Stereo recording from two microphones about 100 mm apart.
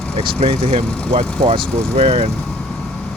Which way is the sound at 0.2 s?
80° right.